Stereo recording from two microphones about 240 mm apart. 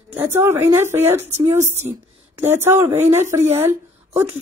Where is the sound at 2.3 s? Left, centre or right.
Centre.